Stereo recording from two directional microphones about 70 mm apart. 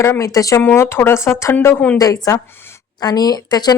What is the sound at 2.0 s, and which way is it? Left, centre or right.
Speech, left.